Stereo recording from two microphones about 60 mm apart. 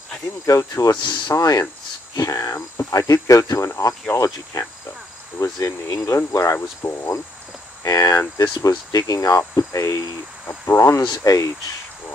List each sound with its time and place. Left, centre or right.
0.5 s speech: left
2.9 s speech: left
7.8 s speech: left
8.4 s speech: left
10.8 s speech: left